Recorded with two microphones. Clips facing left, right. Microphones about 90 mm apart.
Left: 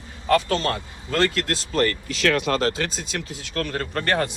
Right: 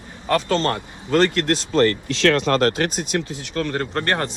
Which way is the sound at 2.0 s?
75° right (ahead or behind).